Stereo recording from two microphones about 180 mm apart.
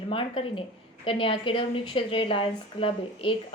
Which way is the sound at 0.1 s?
30° left (ahead or behind).